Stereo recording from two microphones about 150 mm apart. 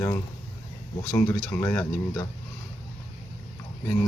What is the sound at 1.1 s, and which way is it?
Speech, 15° left (ahead or behind).